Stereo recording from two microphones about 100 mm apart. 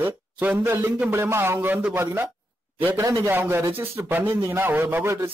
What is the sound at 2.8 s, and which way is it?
Speech, 20° right (ahead or behind).